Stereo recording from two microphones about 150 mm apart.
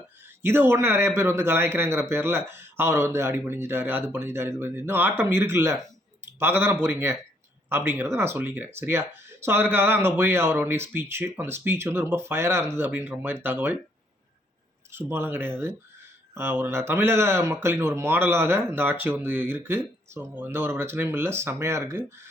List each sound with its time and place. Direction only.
0.3 s speech: 15° right (ahead or behind)
14.9 s speech: 15° right (ahead or behind)